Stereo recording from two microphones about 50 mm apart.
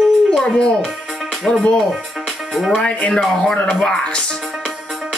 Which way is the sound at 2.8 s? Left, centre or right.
Left.